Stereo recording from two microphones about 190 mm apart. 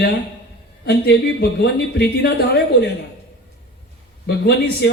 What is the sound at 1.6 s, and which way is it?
Speech, 60° left (ahead or behind).